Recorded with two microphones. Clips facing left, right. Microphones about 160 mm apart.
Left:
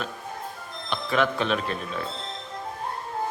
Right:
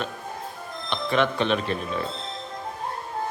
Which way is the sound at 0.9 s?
5° left (ahead or behind).